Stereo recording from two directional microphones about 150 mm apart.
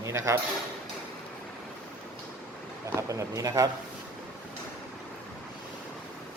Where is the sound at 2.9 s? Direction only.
20° right (ahead or behind).